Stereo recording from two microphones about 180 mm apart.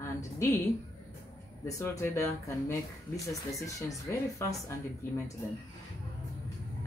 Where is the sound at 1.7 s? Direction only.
15° left (ahead or behind).